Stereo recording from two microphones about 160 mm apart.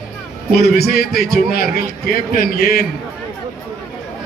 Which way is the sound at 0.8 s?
75° left (ahead or behind).